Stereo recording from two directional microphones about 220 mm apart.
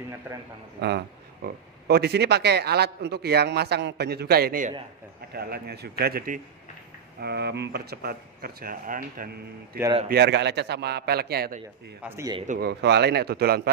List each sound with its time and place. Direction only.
0.7 s speech: 45° right (ahead or behind)
12.0 s speech: 15° right (ahead or behind)
12.5 s speech: 50° right (ahead or behind)